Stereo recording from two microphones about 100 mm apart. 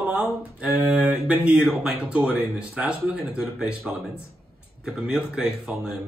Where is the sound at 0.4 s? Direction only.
10° right (ahead or behind).